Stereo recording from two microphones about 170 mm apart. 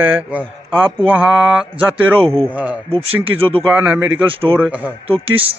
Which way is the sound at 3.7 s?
10° right (ahead or behind).